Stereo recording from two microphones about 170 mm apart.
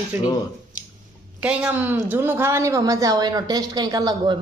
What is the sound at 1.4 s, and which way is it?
A woman's voice, 10° right (ahead or behind).